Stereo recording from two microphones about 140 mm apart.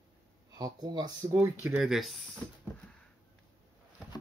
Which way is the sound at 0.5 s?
30° right (ahead or behind).